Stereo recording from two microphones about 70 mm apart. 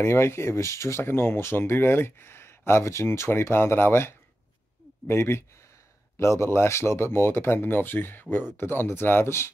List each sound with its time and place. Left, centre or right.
0.0 s speech: left